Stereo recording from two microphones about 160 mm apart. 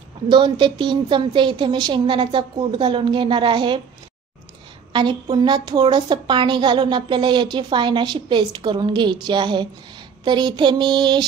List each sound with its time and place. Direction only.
0.3 s a woman's voice: 30° right (ahead or behind)
4.9 s a woman's voice: 30° right (ahead or behind)